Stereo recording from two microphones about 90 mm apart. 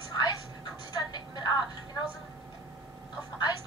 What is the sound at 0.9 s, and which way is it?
Music, 55° left (ahead or behind).